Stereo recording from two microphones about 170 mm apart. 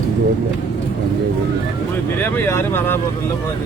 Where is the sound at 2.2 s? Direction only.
15° left (ahead or behind).